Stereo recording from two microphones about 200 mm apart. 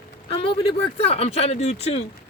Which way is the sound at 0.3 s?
25° left (ahead or behind).